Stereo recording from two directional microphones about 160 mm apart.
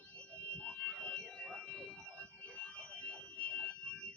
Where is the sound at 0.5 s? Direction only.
5° left (ahead or behind).